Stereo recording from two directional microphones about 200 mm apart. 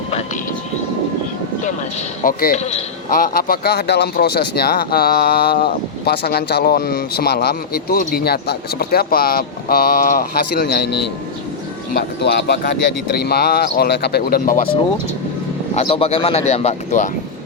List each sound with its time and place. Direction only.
2.2 s speech: 40° left (ahead or behind)
3.1 s speech: 45° left (ahead or behind)
15.7 s speech: 30° left (ahead or behind)